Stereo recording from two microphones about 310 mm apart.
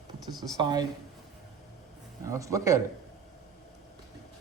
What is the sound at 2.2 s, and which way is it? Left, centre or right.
Speech, centre.